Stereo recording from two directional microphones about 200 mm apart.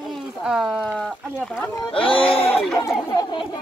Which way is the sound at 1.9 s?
25° left (ahead or behind).